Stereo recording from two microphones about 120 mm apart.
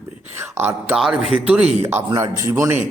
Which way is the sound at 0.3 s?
20° right (ahead or behind).